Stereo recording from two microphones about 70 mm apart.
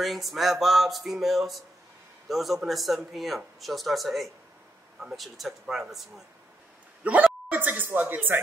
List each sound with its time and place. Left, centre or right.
0.0 s speech: centre
7.0 s speech: right